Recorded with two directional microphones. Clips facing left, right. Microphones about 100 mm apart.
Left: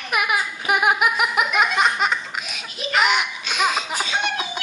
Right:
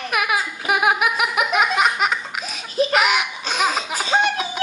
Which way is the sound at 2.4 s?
35° right (ahead or behind).